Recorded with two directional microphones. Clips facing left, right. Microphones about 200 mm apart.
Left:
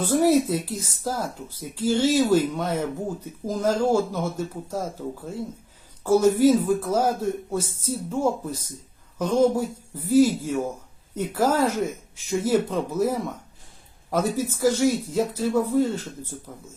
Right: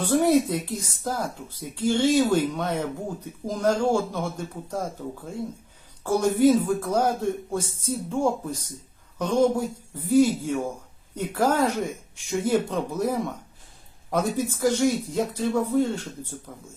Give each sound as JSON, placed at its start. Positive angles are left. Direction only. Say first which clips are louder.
{"t": 0.0, "sound": "speech", "louder": "left 1 dB", "side_deg": 5}
{"t": 6.0, "sound": "speech", "louder": "left 3 dB", "side_deg": 5}